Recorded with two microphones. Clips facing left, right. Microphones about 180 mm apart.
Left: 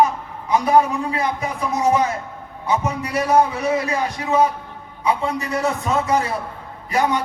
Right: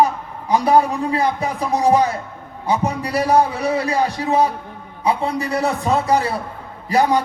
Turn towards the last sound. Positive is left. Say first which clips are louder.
# right 4 dB
turn(degrees=-35)  # may be behind; listen again after turning